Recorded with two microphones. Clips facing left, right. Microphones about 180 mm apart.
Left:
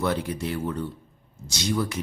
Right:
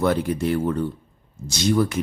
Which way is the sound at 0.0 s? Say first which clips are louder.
Right 6 dB; 50° right (ahead or behind).